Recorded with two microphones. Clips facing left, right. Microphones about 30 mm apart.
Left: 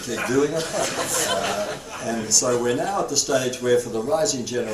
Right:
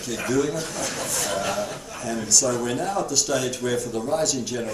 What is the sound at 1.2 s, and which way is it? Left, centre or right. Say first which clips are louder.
Speech: even; left.